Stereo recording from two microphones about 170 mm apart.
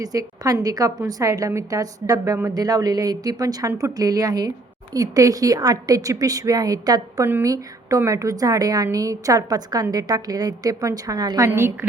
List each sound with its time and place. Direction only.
0.0 s a woman's voice: 20° right (ahead or behind)